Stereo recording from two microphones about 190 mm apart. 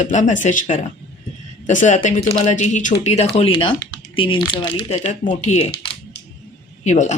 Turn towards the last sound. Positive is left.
turn(degrees=40)  # may be behind; listen again after turning